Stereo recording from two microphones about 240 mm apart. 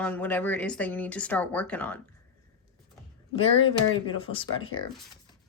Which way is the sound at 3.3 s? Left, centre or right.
Left.